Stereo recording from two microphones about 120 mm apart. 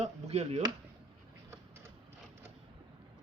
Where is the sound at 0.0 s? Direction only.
65° right (ahead or behind).